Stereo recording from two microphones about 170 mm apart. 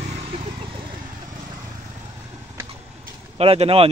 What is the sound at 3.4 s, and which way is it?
Speech, 35° right (ahead or behind).